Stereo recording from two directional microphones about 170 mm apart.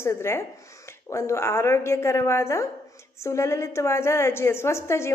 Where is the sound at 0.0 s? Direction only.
15° left (ahead or behind).